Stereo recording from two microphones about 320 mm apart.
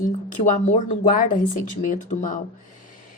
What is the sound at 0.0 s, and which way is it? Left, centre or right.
Speech, left.